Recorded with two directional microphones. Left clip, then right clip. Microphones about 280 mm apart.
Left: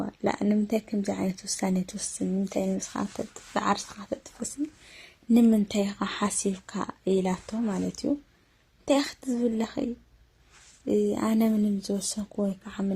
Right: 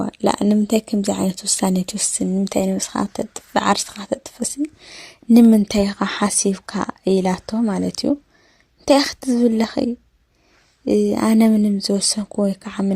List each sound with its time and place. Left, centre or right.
0.0 s speech: right